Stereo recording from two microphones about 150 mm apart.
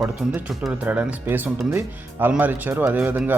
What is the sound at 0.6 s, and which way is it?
Speech, 10° right (ahead or behind).